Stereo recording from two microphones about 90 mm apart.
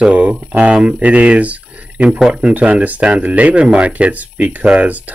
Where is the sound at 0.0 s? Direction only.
15° right (ahead or behind).